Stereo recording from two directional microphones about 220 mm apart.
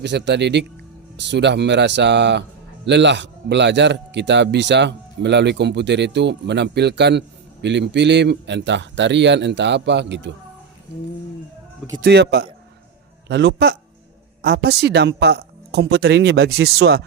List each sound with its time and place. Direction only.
0.0 s speech: 50° right (ahead or behind)
11.9 s speech: 50° right (ahead or behind)